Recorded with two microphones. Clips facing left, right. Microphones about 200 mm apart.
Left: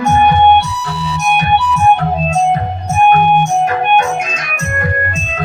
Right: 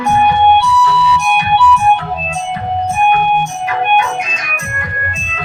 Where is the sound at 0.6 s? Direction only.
45° left (ahead or behind).